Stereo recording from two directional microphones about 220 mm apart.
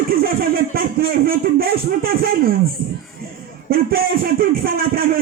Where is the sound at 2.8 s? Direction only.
45° right (ahead or behind).